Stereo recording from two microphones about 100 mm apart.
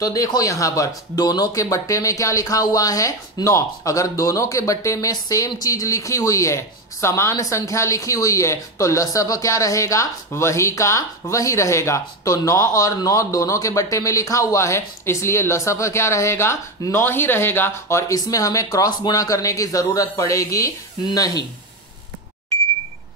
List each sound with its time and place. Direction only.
0.0 s speech: 35° left (ahead or behind)